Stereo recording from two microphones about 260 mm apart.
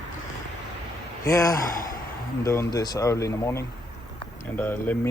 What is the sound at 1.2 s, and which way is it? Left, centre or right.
Speech, centre.